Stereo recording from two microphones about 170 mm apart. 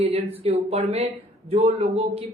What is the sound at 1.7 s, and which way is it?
Speech, 35° right (ahead or behind).